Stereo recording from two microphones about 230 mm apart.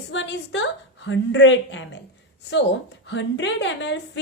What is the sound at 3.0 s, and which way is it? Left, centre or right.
Speech, left.